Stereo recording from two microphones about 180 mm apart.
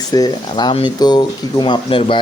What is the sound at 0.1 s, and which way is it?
A man's voice, 20° left (ahead or behind).